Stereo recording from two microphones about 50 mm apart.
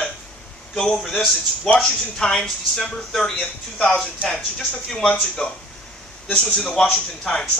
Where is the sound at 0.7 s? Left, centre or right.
Centre.